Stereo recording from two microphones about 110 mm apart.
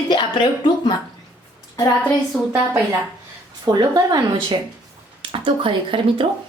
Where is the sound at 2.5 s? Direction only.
20° right (ahead or behind).